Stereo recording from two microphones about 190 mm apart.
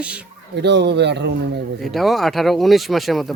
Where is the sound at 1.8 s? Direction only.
Centre (ahead or behind).